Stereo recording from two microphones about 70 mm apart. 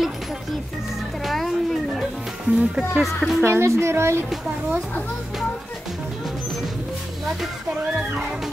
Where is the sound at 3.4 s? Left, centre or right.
Right.